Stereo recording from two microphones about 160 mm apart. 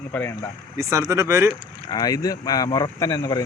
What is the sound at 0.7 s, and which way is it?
Speech, 20° right (ahead or behind).